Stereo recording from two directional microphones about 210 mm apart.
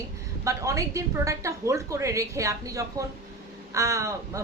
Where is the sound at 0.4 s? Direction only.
15° right (ahead or behind).